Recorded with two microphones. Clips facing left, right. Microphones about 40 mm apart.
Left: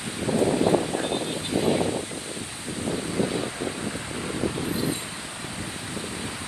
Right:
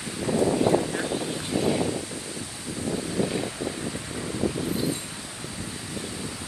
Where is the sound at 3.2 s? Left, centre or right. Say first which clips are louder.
Left 1 dB; left.